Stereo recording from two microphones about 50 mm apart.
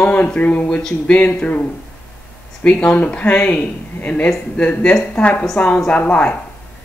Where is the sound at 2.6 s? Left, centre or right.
Left.